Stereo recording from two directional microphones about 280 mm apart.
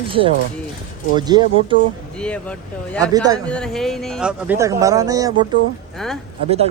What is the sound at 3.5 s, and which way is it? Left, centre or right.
Speech, centre.